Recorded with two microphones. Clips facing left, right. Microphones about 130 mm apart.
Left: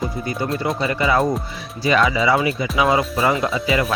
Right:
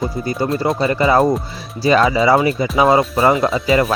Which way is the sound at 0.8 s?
35° right (ahead or behind).